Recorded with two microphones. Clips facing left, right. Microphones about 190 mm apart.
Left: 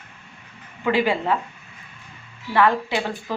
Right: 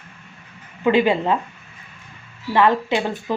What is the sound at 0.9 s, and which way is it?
Speech, 20° right (ahead or behind).